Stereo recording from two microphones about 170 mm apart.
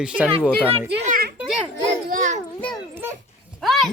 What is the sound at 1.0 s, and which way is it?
Speech, 55° right (ahead or behind).